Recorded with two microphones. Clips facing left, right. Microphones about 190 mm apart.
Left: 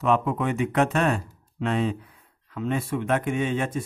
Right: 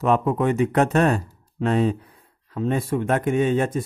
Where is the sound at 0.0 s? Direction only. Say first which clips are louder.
Right 3 dB; 40° right (ahead or behind).